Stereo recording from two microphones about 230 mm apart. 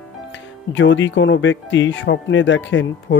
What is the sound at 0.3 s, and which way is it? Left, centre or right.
Speech, left.